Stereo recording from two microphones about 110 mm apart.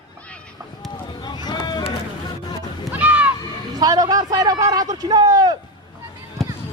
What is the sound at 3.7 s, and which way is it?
A man's voice, 35° right (ahead or behind).